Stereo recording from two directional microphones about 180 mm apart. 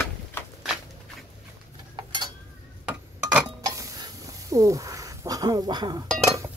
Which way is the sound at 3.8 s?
20° right (ahead or behind).